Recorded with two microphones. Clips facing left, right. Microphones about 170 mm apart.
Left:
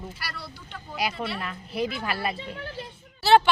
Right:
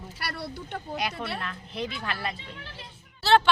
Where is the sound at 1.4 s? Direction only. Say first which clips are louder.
Left 4 dB; 5° left (ahead or behind).